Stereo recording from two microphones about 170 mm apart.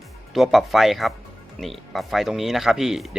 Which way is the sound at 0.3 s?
Centre (ahead or behind).